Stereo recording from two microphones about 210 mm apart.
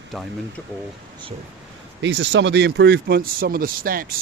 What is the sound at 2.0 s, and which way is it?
Speech, 60° right (ahead or behind).